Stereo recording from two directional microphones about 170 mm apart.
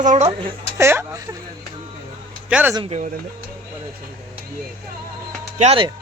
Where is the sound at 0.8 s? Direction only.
15° right (ahead or behind).